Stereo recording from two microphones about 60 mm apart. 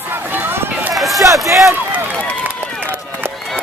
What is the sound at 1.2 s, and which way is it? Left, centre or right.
Run, right.